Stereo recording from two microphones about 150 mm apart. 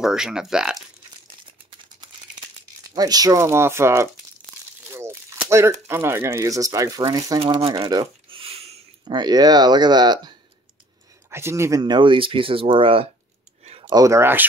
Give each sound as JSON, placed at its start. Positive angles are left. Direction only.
{"t": 0.0, "sound": "speech", "side_deg": -5}
{"t": 2.9, "sound": "speech", "side_deg": -25}
{"t": 7.3, "sound": "speech", "side_deg": -35}
{"t": 7.9, "sound": "a sound", "side_deg": -35}
{"t": 9.0, "sound": "speech", "side_deg": -30}
{"t": 11.2, "sound": "speech", "side_deg": -15}
{"t": 11.8, "sound": "speech", "side_deg": -30}
{"t": 13.7, "sound": "a sound", "side_deg": -40}
{"t": 13.9, "sound": "speech", "side_deg": -20}